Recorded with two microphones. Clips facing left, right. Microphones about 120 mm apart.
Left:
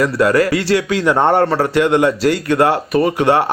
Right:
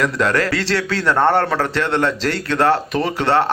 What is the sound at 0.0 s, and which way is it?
Speech, 5° left (ahead or behind).